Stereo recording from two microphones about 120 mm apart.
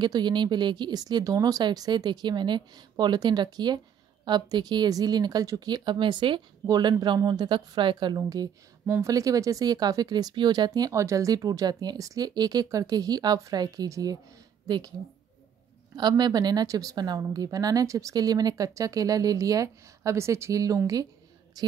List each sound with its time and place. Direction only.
0.0 s a woman's voice: 40° right (ahead or behind)
16.0 s a woman's voice: 35° right (ahead or behind)